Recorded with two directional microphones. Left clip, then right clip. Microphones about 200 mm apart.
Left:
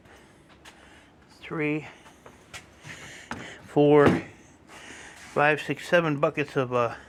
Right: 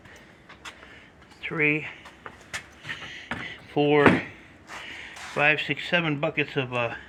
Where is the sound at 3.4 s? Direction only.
35° left (ahead or behind).